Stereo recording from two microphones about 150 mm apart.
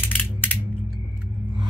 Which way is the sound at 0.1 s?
10° left (ahead or behind).